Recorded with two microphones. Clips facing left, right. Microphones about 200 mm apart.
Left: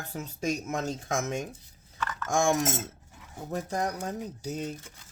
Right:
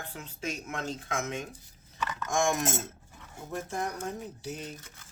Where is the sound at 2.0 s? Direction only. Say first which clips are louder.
Even; 15° right (ahead or behind).